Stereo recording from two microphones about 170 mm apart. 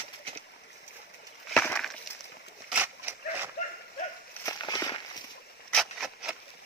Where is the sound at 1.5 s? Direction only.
5° left (ahead or behind).